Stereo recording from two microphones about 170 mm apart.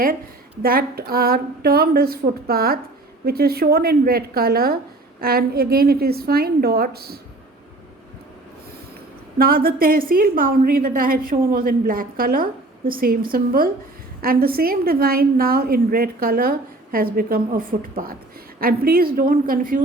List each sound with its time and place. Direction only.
0.6 s a woman's voice: 60° right (ahead or behind)
9.4 s a woman's voice: 60° right (ahead or behind)